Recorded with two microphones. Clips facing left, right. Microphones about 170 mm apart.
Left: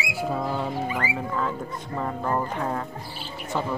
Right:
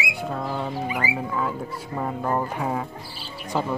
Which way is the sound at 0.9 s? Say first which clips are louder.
Right 1 dB; 10° right (ahead or behind).